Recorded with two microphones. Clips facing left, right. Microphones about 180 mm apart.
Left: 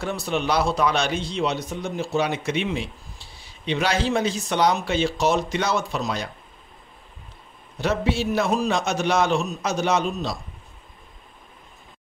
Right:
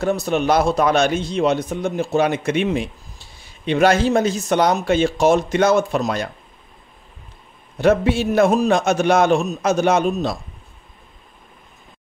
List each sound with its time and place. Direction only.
0.0 s speech: 45° right (ahead or behind)
7.7 s speech: 50° right (ahead or behind)